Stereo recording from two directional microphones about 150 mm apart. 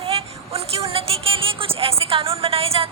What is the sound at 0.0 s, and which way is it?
A woman's voice, 40° right (ahead or behind).